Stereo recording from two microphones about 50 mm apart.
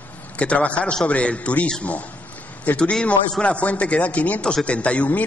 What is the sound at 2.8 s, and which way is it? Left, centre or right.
A man's voice, centre.